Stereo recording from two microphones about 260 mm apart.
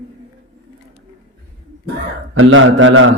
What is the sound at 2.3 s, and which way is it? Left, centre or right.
Speech, right.